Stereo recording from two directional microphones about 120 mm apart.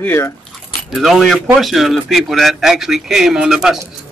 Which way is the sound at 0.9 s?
Centre (ahead or behind).